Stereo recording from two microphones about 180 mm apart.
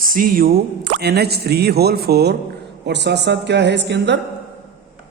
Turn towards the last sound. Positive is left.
turn(degrees=-75)  # may be behind; listen again after turning